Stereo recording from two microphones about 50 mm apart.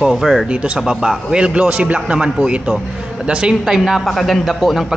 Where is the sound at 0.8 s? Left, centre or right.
Centre.